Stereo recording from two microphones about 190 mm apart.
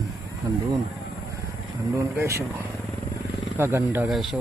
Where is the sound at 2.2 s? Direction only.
15° right (ahead or behind).